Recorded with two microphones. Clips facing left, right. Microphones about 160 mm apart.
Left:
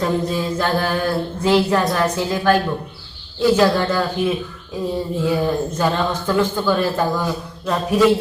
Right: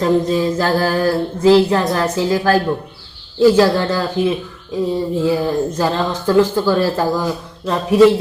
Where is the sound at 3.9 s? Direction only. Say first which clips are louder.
Right 2 dB; 35° right (ahead or behind).